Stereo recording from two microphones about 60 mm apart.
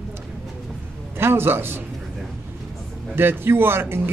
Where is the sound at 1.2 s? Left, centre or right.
Right.